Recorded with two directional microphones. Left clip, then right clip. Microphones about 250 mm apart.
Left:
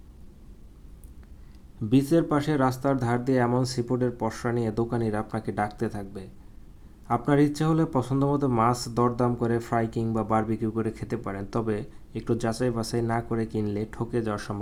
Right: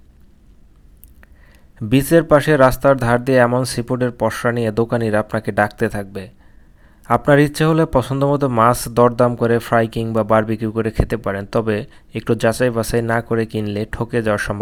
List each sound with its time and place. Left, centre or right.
1.9 s speech: right